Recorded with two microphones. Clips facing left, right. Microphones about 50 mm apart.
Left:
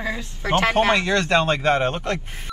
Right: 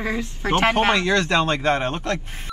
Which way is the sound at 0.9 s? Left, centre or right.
Left.